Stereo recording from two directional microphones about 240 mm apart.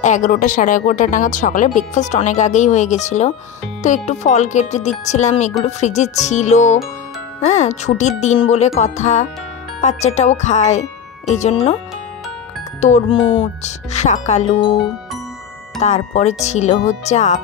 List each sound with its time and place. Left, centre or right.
0.0 s speech: left
12.8 s speech: left
15.8 s speech: left